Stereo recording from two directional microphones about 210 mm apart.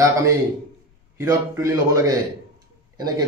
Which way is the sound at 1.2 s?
15° right (ahead or behind).